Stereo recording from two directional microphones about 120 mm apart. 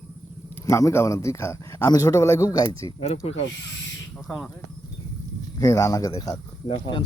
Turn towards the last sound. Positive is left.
turn(degrees=40)  # may be behind; listen again after turning